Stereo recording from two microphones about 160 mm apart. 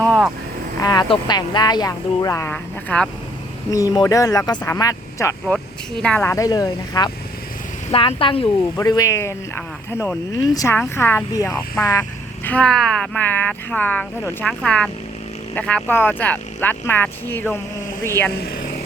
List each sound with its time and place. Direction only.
0.0 s vehicle: 5° left (ahead or behind)
0.8 s speech: 25° left (ahead or behind); by 3.1 s 10° left (ahead or behind)
3.7 s speech: 20° left (ahead or behind)
6.0 s speech: 5° left (ahead or behind)
6.2 s speech: 20° left (ahead or behind)
8.7 s speech: 20° left (ahead or behind)
12.5 s speech: 5° left (ahead or behind)